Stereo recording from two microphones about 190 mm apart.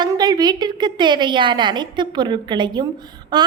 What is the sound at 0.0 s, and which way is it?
A woman's voice, 20° right (ahead or behind).